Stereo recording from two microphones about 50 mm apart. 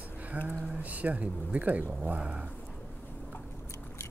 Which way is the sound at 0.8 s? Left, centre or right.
Right.